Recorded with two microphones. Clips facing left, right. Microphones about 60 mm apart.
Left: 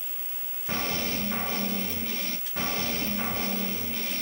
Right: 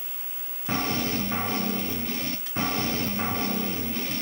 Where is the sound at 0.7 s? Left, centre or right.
Right.